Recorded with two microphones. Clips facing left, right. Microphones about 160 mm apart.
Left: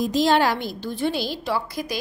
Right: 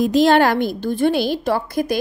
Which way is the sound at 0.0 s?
60° right (ahead or behind).